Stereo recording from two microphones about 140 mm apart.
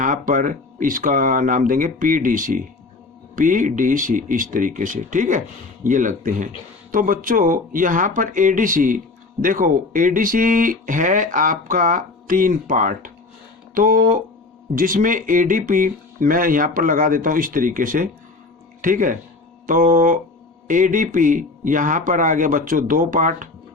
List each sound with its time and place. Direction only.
0.0 s speech: 70° right (ahead or behind)
6.9 s speech: 75° right (ahead or behind)
13.7 s speech: 80° right